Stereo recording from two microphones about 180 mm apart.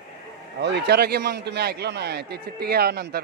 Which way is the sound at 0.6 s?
70° right (ahead or behind).